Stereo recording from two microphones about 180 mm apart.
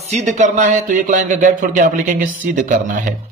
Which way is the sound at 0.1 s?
40° right (ahead or behind).